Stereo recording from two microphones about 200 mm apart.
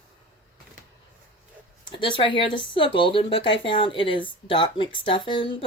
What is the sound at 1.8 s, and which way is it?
Speech, 25° left (ahead or behind).